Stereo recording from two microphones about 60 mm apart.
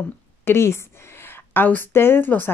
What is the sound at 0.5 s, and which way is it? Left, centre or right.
Speech, left.